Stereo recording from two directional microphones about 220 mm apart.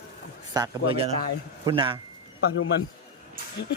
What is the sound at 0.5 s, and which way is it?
A man's voice, 20° right (ahead or behind).